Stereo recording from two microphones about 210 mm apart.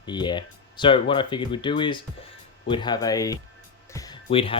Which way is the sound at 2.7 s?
20° left (ahead or behind).